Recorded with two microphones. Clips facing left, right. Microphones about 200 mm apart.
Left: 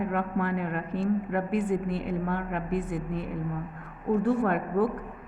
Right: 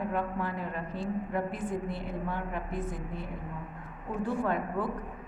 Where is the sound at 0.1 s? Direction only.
60° left (ahead or behind).